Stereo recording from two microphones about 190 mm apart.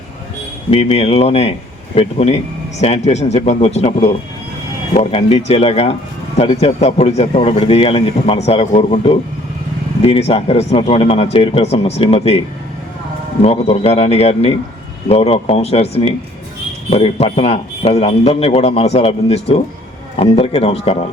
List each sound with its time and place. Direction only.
0.7 s speech: 30° left (ahead or behind)
13.4 s speech: 35° left (ahead or behind)